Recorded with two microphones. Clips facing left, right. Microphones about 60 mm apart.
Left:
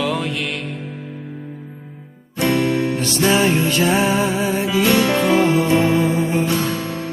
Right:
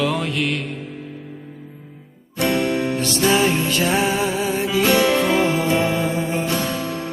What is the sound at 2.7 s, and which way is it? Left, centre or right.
Music, right.